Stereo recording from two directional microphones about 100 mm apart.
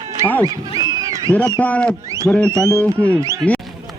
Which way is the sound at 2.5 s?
30° right (ahead or behind).